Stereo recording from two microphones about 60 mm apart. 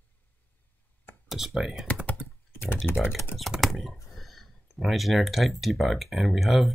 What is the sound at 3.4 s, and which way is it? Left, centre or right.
Speech, centre.